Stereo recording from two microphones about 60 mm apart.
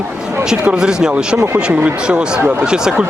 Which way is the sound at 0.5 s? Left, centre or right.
Centre.